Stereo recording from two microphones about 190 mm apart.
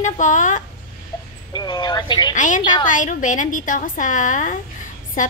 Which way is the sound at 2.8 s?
45° left (ahead or behind).